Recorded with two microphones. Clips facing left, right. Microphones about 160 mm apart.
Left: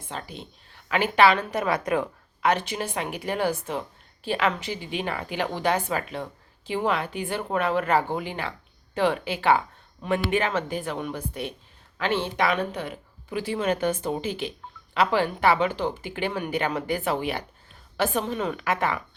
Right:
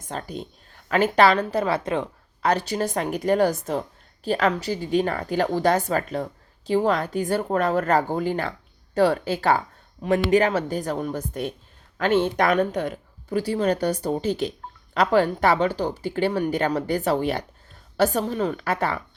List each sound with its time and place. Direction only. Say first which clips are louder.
0.0 s a woman's voice: right 5 dB; 45° right (ahead or behind)